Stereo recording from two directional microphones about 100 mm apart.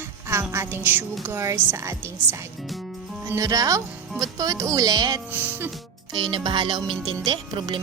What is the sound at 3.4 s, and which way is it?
Speech, 35° right (ahead or behind).